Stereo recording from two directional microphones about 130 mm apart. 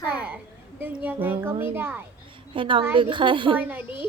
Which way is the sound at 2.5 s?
40° right (ahead or behind).